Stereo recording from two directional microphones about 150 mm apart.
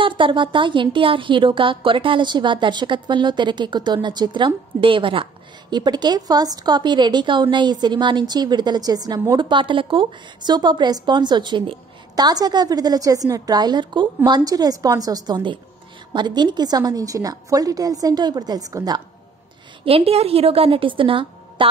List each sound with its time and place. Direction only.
0.0 s a woman's voice: 35° right (ahead or behind)
19.8 s speech: 40° right (ahead or behind)